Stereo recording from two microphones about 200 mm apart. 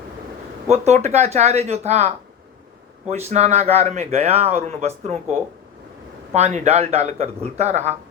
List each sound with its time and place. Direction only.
0.7 s speech: 35° right (ahead or behind)
3.1 s speech: 35° right (ahead or behind)
6.3 s speech: 35° right (ahead or behind)